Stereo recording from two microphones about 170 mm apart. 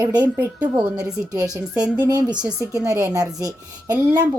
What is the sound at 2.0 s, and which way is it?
A woman's voice, 25° right (ahead or behind).